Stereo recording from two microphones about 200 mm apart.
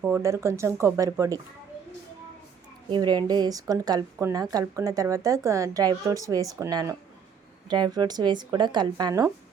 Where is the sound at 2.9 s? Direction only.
20° right (ahead or behind).